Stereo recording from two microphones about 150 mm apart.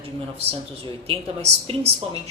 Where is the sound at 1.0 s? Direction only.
40° right (ahead or behind).